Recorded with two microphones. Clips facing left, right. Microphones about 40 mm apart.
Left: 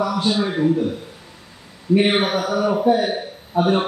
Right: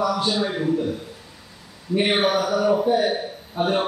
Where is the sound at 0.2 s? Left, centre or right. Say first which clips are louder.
Left 2 dB; left.